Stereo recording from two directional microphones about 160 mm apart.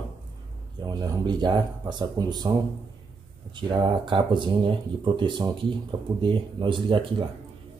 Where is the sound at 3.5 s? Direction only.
30° right (ahead or behind).